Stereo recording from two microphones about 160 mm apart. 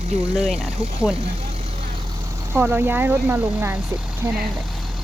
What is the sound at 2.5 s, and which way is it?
Speech, 10° right (ahead or behind).